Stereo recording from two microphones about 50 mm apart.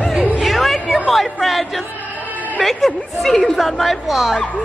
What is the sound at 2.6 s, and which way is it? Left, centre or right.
A woman's voice, centre.